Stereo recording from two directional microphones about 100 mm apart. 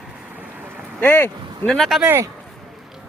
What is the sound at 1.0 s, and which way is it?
Speech, 20° left (ahead or behind).